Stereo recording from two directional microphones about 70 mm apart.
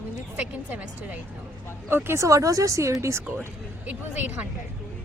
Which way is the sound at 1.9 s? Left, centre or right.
Right.